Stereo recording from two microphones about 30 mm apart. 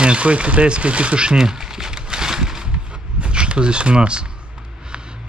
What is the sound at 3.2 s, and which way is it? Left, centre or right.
Speech, right.